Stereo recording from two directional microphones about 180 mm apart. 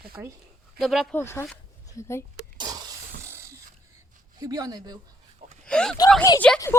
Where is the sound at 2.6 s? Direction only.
20° right (ahead or behind).